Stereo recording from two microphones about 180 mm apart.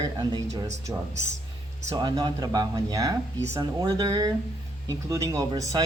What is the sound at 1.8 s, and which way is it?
Speech, 20° right (ahead or behind).